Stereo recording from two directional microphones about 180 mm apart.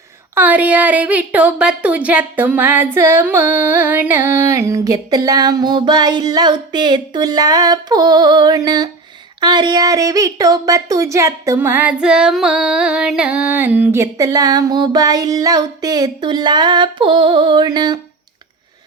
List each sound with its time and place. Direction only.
0.3 s a woman's voice: 10° right (ahead or behind)